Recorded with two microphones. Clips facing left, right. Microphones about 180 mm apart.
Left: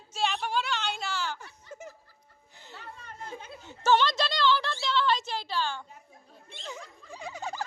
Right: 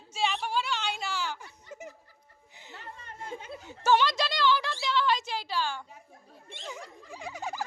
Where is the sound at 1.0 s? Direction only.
15° right (ahead or behind).